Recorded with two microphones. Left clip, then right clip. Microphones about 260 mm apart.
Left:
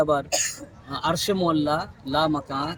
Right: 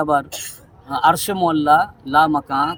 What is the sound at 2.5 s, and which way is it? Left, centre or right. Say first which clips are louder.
Speech: right 9 dB; right.